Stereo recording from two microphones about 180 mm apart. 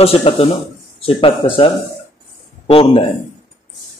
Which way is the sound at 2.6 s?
30° left (ahead or behind).